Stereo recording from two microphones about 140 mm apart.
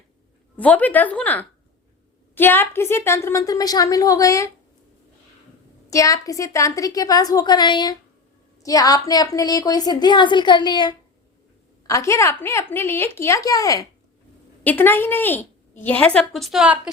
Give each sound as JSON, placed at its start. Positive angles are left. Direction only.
{"t": 0.5, "sound": "a woman's voice", "side_deg": 10}
{"t": 5.9, "sound": "a woman's voice", "side_deg": 25}
{"t": 11.9, "sound": "a woman's voice", "side_deg": 20}
{"t": 14.6, "sound": "a woman's voice", "side_deg": 15}